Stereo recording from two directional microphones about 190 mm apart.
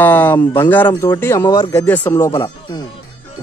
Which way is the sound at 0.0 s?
10° left (ahead or behind).